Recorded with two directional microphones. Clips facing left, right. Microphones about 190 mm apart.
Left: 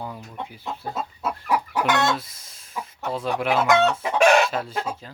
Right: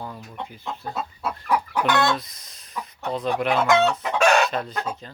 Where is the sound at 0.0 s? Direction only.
10° left (ahead or behind).